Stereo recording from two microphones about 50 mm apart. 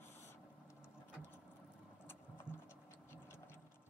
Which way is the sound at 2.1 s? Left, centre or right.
Left.